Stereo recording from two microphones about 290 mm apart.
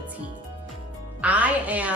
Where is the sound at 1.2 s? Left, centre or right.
Centre.